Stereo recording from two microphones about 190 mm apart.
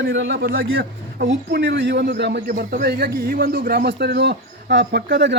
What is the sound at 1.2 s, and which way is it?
A man's voice, 60° right (ahead or behind).